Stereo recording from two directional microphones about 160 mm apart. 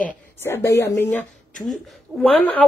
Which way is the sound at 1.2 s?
Centre (ahead or behind).